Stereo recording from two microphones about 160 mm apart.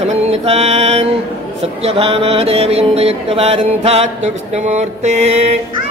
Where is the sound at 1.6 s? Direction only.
40° right (ahead or behind).